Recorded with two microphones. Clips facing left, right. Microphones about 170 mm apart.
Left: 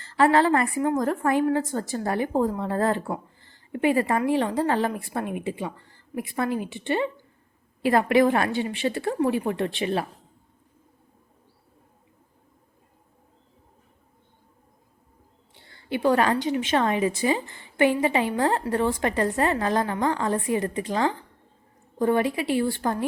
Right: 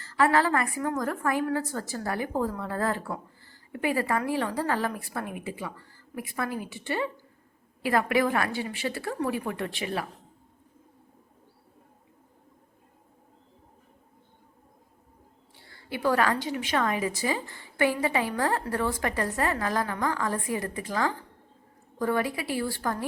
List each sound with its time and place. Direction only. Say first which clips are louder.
0.0 s a woman's voice: left 4 dB; 25° left (ahead or behind)
15.5 s a woman's voice: left 7 dB; 20° left (ahead or behind)